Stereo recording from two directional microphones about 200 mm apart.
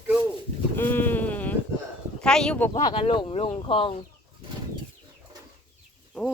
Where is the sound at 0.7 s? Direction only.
10° left (ahead or behind).